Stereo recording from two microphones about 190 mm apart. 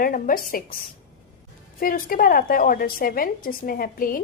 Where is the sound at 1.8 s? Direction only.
50° left (ahead or behind).